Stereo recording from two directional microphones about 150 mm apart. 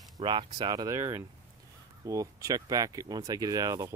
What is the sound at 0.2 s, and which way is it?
Speech, 35° right (ahead or behind).